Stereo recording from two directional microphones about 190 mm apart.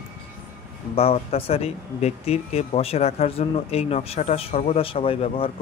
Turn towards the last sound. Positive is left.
turn(degrees=30)  # may be behind; listen again after turning